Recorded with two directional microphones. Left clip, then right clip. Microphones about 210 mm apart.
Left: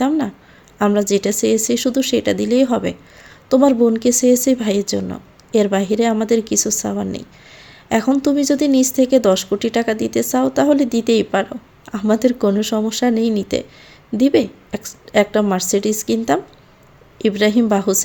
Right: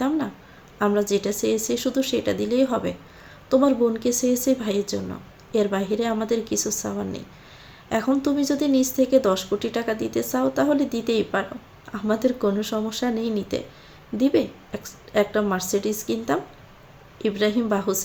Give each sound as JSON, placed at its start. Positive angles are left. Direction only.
{"t": 0.8, "sound": "speech", "side_deg": 45}